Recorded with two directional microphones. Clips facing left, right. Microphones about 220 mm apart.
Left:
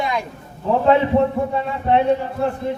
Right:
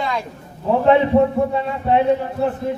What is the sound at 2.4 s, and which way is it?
Speech, 5° right (ahead or behind).